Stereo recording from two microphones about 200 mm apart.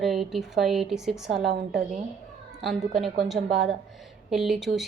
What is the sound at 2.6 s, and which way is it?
A woman's voice, centre (ahead or behind).